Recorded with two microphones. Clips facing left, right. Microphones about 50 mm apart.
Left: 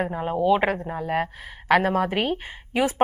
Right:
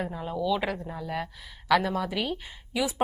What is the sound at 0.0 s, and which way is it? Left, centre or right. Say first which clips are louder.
Speech: left 7 dB; left.